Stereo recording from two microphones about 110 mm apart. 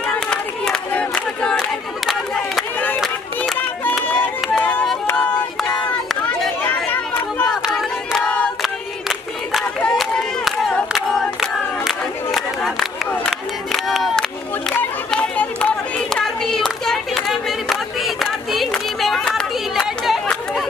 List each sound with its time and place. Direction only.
0.0 s crowd: 10° left (ahead or behind)
4.0 s run: 15° left (ahead or behind)
5.0 s a sound: 15° left (ahead or behind)
6.6 s chatter: 15° left (ahead or behind)
7.4 s crowd: centre (ahead or behind)
9.9 s crowd: centre (ahead or behind)
15.0 s hands: 10° left (ahead or behind)